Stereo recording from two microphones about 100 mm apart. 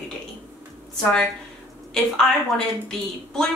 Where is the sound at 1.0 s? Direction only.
5° left (ahead or behind).